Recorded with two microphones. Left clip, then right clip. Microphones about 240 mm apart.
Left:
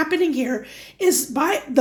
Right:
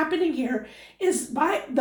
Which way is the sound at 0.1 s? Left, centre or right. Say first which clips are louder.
Left 4 dB; left.